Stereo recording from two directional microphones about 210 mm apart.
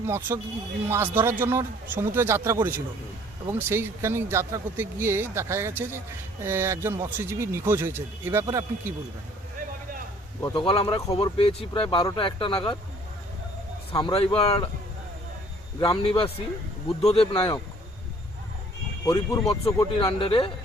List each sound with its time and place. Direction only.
0.0 s speech: 10° right (ahead or behind)
10.4 s speech: 25° left (ahead or behind)
13.9 s speech: 25° left (ahead or behind)
15.8 s speech: 25° left (ahead or behind)
19.0 s speech: 20° left (ahead or behind)